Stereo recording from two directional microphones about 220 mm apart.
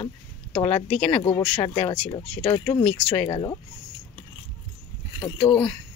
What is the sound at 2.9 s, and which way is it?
Speech, 5° left (ahead or behind).